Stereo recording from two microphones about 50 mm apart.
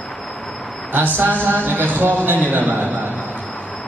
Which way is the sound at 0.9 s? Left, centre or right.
Right.